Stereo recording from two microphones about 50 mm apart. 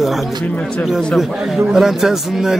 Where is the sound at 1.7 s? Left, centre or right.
Centre.